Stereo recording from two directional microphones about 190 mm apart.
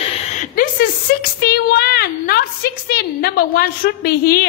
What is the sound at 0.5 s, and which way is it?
Speech, 50° left (ahead or behind).